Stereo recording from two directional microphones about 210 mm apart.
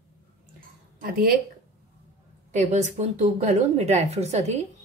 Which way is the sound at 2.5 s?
35° right (ahead or behind).